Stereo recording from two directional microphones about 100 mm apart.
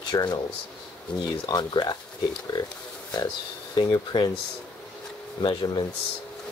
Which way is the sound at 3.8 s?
45° left (ahead or behind).